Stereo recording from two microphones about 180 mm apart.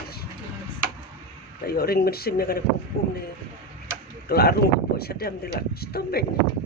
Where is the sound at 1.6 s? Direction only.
60° left (ahead or behind).